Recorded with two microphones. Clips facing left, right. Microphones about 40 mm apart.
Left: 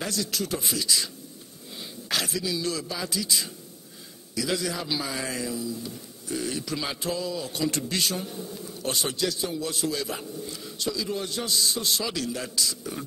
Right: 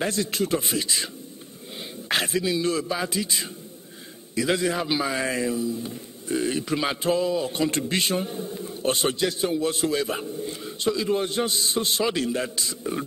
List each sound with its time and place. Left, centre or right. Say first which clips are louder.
0.0 s speech: right 5 dB; right